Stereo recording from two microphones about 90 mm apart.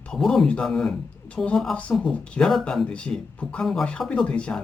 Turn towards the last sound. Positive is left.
turn(degrees=10)  # may be behind; listen again after turning